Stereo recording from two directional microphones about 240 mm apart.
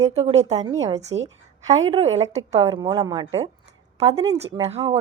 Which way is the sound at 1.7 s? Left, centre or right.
Centre.